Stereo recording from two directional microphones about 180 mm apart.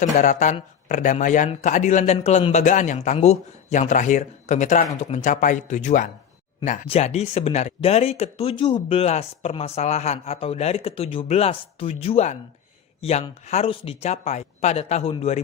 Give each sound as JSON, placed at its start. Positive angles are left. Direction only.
{"t": 0.0, "sound": "speech", "side_deg": 45}